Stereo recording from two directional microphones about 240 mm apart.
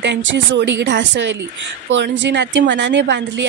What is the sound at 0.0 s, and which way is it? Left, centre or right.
A woman's voice, right.